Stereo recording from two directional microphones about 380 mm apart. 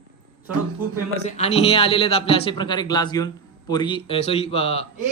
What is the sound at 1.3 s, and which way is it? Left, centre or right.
A man's voice, centre.